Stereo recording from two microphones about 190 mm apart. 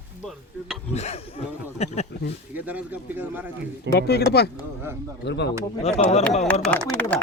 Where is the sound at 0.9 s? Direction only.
35° left (ahead or behind).